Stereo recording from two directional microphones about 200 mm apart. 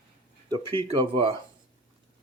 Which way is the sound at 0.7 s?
25° right (ahead or behind).